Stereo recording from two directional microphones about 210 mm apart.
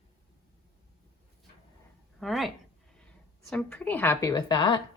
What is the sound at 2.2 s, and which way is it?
A woman's voice, centre (ahead or behind).